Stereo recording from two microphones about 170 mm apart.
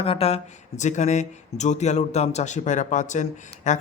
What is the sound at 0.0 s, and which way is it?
Speech, 35° left (ahead or behind).